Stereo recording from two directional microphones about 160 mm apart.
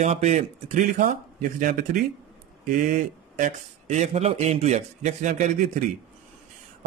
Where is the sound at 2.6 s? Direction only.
55° right (ahead or behind).